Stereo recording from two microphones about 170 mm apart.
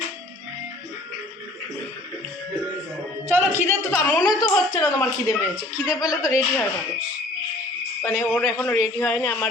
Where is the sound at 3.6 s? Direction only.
15° left (ahead or behind).